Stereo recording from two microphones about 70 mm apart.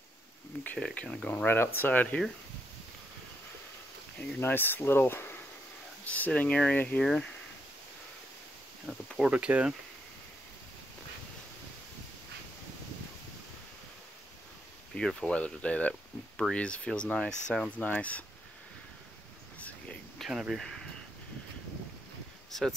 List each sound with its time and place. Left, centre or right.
0.5 s speech: left
1.4 s speech: left
4.4 s speech: left
6.0 s speech: left
8.9 s speech: centre
9.2 s speech: centre
15.0 s speech: centre
20.2 s speech: centre
20.5 s speech: centre
22.5 s speech: centre